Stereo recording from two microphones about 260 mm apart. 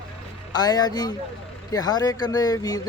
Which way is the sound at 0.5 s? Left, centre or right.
Centre.